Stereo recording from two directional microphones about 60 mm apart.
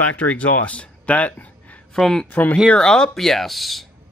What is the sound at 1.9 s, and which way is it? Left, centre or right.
Speech, centre.